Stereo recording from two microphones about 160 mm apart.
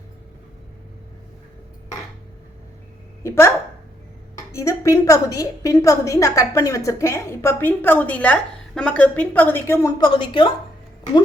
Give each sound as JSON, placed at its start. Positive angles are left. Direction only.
{"t": 3.2, "sound": "a woman's voice", "side_deg": 15}
{"t": 10.0, "sound": "speech", "side_deg": 30}